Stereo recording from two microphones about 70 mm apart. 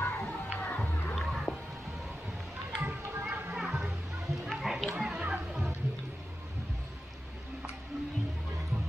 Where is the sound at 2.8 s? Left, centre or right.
Right.